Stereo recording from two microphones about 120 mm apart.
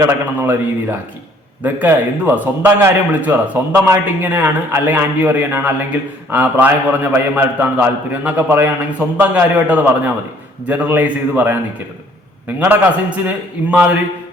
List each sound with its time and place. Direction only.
0.0 s a man's voice: 15° right (ahead or behind)
12.5 s a man's voice: 15° right (ahead or behind)